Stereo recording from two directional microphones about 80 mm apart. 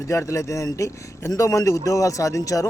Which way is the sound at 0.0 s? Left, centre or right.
Left.